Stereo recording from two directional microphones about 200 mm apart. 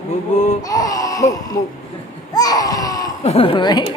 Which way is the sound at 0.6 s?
20° left (ahead or behind).